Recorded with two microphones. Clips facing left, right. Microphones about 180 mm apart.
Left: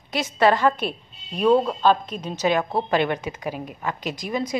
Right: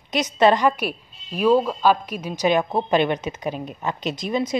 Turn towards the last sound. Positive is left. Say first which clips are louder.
# right 3 dB
turn(degrees=-20)  # may be behind; listen again after turning